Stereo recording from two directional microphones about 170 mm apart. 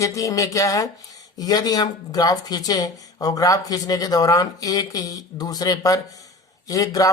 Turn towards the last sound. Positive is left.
turn(degrees=20)  # may be behind; listen again after turning